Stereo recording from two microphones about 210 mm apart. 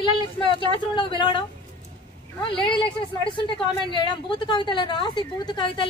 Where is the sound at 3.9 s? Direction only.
25° left (ahead or behind).